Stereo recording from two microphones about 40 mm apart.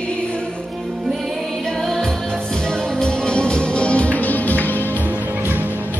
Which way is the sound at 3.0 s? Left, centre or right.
Left.